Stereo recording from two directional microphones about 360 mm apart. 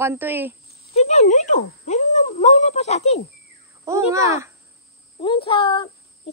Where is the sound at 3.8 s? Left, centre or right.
Centre.